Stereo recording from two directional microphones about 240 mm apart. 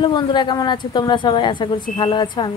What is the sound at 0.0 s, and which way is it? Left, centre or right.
Speech, centre.